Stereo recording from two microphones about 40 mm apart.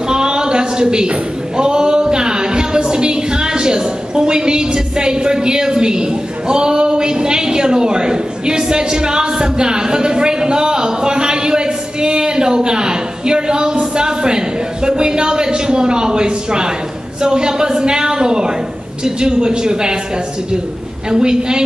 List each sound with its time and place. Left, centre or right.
0.1 s a sound: centre
1.6 s a woman's voice: right
21.1 s a woman's voice: centre